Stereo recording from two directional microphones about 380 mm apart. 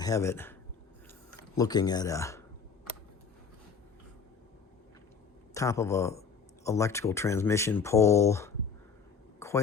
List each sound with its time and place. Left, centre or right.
0.0 s speech: centre
1.5 s speech: centre
5.5 s speech: centre
9.4 s a sound: centre